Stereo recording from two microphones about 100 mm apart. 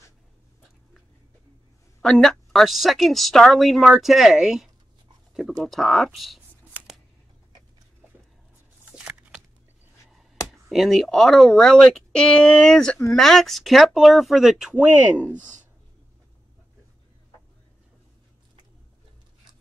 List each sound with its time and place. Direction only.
2.0 s speech: 5° left (ahead or behind)
6.7 s scissors: 15° right (ahead or behind)
8.8 s a sound: 10° right (ahead or behind)
10.7 s speech: centre (ahead or behind)